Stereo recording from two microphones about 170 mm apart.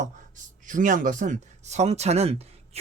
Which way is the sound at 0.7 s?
50° right (ahead or behind).